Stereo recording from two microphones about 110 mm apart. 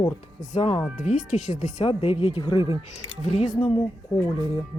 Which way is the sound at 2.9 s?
75° left (ahead or behind).